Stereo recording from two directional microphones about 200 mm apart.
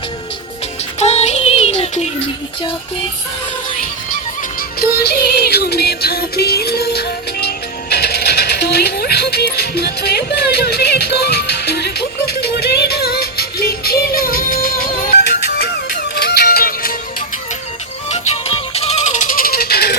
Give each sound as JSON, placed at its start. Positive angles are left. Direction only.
{"t": 0.9, "sound": "music", "side_deg": 35}
{"t": 4.8, "sound": "music", "side_deg": 50}
{"t": 15.5, "sound": "music", "side_deg": 55}
{"t": 18.1, "sound": "music", "side_deg": 30}